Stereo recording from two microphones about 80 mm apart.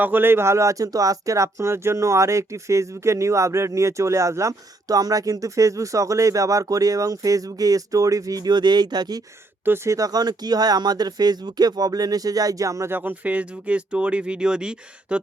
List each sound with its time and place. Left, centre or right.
0.0 s speech: right
9.6 s speech: right
12.9 s speech: right